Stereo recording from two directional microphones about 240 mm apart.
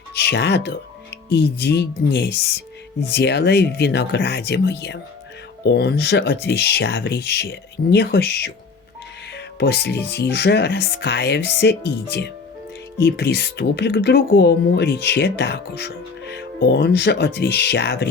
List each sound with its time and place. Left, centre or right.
0.2 s speech: left
13.0 s speech: left